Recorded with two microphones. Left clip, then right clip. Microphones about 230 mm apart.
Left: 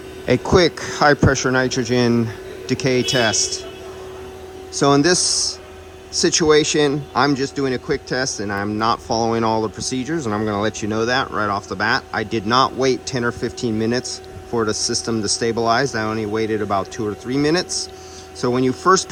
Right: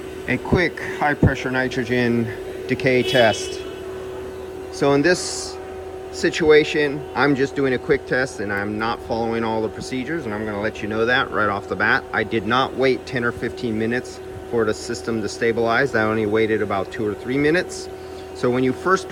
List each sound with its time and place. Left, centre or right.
0.3 s speech: centre
4.7 s speech: centre